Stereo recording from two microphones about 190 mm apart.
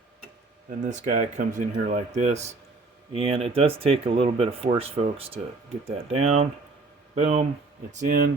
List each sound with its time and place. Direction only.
0.9 s speech: 40° right (ahead or behind)